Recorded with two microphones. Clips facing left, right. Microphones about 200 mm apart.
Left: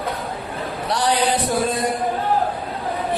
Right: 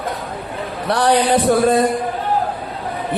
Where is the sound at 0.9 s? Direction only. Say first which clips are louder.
Right 5 dB; 60° right (ahead or behind).